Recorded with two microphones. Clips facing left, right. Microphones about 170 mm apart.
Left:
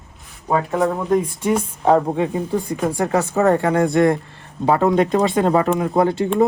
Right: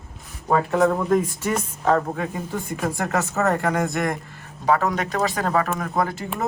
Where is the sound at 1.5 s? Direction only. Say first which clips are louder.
Left 5 dB; 20° left (ahead or behind).